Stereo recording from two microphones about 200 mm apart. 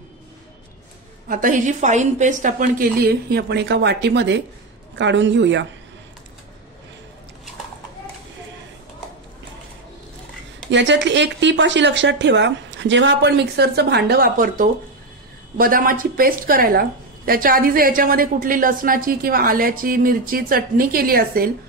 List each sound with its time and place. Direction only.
1.3 s a woman's voice: 40° right (ahead or behind); by 5.7 s 60° right (ahead or behind)
10.7 s a woman's voice: 65° right (ahead or behind); by 21.5 s 50° right (ahead or behind)